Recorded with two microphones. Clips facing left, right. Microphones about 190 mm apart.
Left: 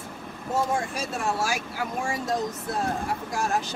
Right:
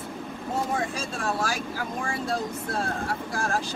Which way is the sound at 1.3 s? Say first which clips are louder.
Left 1 dB; 10° left (ahead or behind).